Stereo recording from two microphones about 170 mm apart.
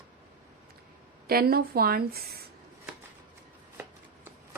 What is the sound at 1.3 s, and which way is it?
Speech, 60° right (ahead or behind).